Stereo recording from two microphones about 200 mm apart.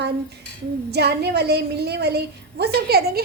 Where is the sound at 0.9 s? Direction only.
55° right (ahead or behind).